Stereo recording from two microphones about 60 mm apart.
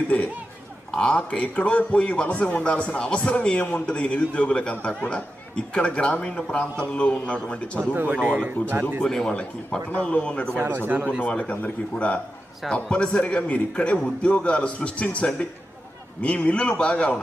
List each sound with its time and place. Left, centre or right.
0.1 s a man's voice: left
7.9 s speech: right
9.0 s a man's voice: centre
10.0 s a man's voice: centre
10.5 s speech: right
11.2 s a man's voice: left